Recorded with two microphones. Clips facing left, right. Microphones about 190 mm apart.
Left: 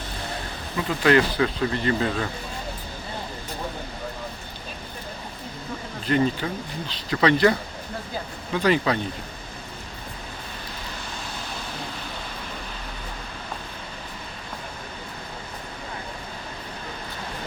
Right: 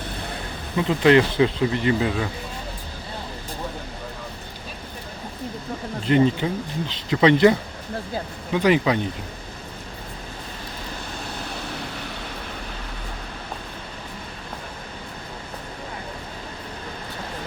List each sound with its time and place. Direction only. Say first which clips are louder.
0.9 s speech: right 3 dB; 20° right (ahead or behind)
6.1 s speech: right 4 dB; 20° right (ahead or behind)
8.5 s speech: right 3 dB; 15° right (ahead or behind)